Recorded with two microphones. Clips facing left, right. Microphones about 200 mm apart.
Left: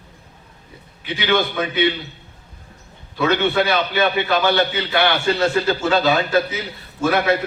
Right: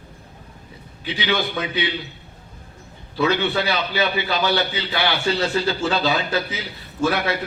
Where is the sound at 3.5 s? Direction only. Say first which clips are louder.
Left 4 dB; 55° left (ahead or behind).